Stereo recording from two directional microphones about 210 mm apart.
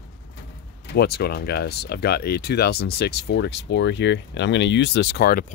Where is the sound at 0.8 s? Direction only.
50° left (ahead or behind).